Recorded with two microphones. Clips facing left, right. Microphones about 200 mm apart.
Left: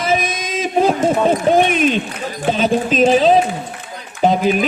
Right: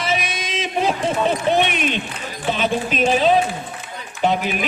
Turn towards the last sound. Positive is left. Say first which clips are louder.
# left 5 dB
turn(degrees=40)  # may be behind; listen again after turning